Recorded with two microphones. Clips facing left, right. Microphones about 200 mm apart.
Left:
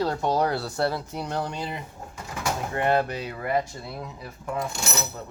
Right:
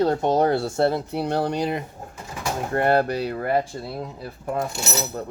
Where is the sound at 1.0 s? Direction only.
60° right (ahead or behind).